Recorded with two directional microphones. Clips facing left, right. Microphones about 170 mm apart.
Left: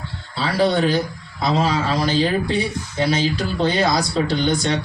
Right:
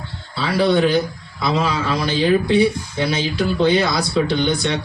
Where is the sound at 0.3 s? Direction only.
40° left (ahead or behind).